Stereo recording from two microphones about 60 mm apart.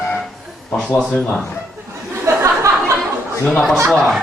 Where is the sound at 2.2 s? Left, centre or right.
Right.